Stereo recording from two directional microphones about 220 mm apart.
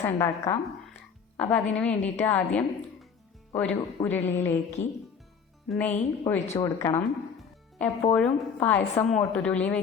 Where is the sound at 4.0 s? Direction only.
10° left (ahead or behind).